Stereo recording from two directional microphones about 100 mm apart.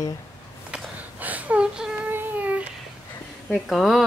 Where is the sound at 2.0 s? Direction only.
15° right (ahead or behind).